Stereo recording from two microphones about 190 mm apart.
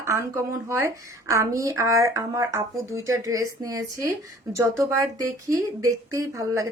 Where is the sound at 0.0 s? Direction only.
15° right (ahead or behind).